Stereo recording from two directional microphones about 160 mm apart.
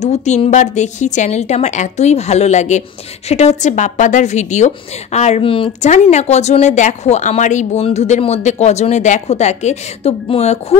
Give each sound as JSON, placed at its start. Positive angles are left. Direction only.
{"t": 0.0, "sound": "a woman's voice", "side_deg": 45}